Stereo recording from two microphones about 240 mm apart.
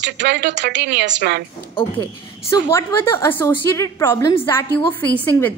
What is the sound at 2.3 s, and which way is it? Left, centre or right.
A woman's voice, centre.